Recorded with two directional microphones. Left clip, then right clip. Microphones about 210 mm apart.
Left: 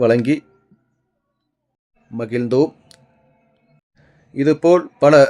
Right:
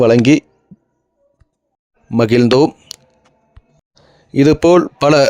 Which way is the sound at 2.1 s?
45° right (ahead or behind).